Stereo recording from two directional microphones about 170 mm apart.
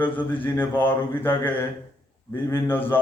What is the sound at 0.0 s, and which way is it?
A man's voice, 10° left (ahead or behind).